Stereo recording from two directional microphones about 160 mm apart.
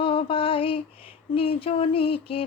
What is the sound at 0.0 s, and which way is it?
Female singing, 35° left (ahead or behind).